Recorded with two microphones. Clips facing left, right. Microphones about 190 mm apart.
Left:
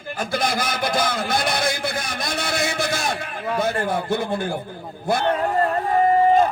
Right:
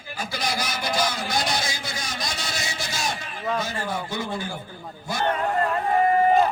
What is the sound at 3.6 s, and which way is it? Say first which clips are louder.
Speech: left 7 dB; 55° left (ahead or behind).